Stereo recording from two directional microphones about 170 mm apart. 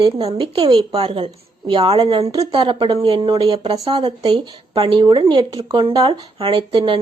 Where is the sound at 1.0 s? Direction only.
35° right (ahead or behind).